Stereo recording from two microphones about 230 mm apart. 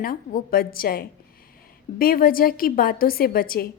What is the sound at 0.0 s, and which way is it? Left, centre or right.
A woman's voice, left.